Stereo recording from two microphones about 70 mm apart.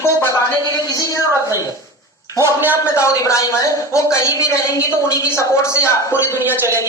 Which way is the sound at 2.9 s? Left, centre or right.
Left.